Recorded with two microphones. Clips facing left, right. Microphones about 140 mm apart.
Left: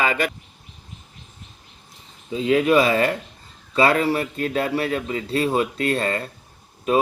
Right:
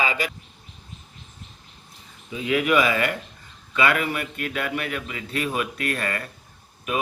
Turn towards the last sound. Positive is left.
turn(degrees=30)  # may be behind; listen again after turning